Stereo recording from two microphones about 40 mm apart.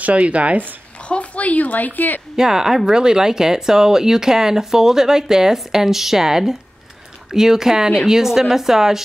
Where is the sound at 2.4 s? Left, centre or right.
Centre.